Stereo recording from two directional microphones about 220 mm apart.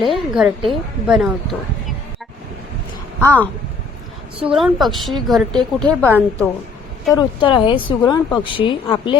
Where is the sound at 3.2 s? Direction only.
5° left (ahead or behind).